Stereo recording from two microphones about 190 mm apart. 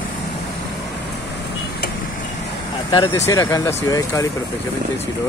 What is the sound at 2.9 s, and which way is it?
Speech, 20° left (ahead or behind).